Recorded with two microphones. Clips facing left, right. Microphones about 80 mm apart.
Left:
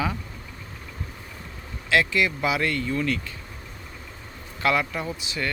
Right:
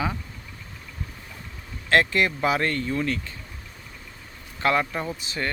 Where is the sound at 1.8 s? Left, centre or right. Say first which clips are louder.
Right 1 dB; right.